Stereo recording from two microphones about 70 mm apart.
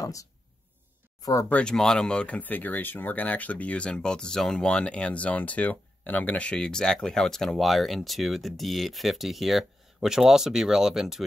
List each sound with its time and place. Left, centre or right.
0.0 s a sound: left
1.2 s speech: left
1.5 s speech: centre